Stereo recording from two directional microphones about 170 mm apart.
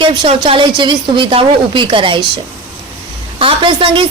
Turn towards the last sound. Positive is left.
turn(degrees=-30)  # may be behind; listen again after turning